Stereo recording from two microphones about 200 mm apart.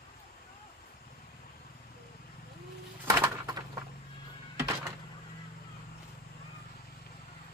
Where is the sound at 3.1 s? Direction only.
20° right (ahead or behind).